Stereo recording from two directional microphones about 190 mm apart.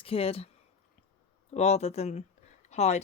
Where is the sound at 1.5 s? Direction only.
35° left (ahead or behind).